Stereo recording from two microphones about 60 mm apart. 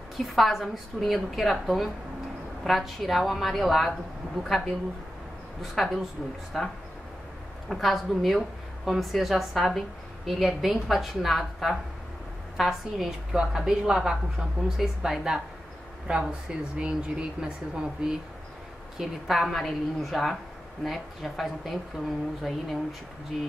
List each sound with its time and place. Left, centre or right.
0.2 s a woman's voice: centre